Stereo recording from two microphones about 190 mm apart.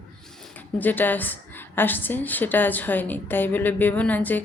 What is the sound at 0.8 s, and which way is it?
A woman's voice, 10° left (ahead or behind).